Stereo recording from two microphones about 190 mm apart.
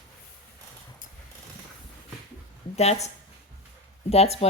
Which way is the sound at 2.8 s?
35° left (ahead or behind).